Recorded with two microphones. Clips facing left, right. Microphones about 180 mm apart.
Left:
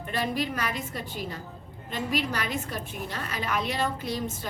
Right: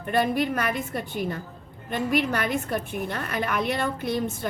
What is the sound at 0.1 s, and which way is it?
A woman's voice, 55° right (ahead or behind).